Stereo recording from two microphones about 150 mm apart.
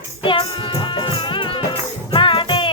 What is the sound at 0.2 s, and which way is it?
Music, 35° left (ahead or behind).